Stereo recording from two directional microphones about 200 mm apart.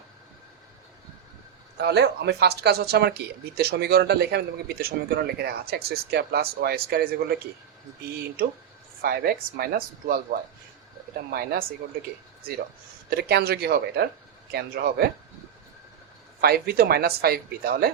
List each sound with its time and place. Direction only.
1.8 s speech: 55° right (ahead or behind)
8.4 s speech: 50° right (ahead or behind)
11.3 s speech: 50° right (ahead or behind)
13.1 s speech: 55° right (ahead or behind)
16.4 s speech: 50° right (ahead or behind)